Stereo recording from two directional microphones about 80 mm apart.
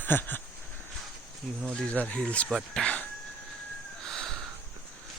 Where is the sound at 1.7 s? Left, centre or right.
Centre.